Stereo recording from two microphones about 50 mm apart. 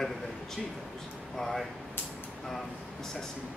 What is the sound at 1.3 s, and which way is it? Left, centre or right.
Speech, centre.